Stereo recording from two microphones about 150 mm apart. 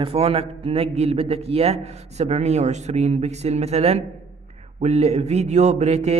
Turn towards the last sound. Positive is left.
turn(degrees=-50)  # may be behind; listen again after turning